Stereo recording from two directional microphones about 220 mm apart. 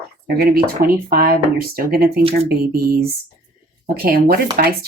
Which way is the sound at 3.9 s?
40° right (ahead or behind).